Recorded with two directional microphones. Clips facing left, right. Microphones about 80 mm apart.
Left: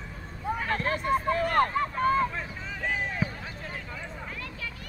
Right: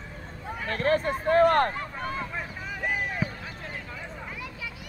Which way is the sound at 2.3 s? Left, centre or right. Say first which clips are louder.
Right 1 dB; centre.